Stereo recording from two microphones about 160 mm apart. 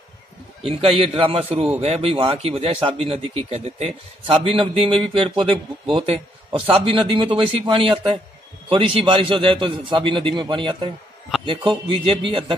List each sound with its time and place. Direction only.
0.6 s speech: 35° right (ahead or behind)